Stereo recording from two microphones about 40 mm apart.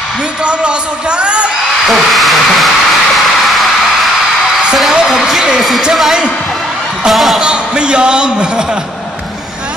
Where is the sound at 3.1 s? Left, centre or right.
Centre.